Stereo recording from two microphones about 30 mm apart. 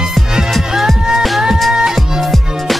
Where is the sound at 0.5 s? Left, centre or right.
Centre.